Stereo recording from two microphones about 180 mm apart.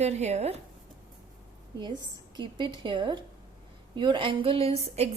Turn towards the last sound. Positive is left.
turn(degrees=-35)  # may be behind; listen again after turning